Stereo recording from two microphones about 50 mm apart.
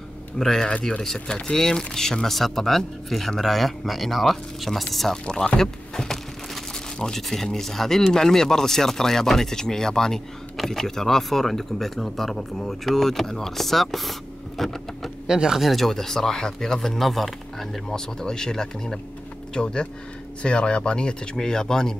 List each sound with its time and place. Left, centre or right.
0.4 s speech: centre
15.2 s speech: centre
15.6 s speech: centre